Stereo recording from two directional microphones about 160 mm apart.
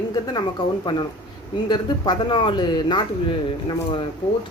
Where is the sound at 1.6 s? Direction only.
25° left (ahead or behind).